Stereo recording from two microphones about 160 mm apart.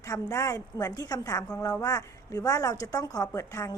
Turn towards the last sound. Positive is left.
turn(degrees=20)  # may be behind; listen again after turning